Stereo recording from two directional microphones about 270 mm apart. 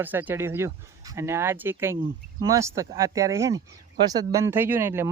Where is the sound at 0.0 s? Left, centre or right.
Centre.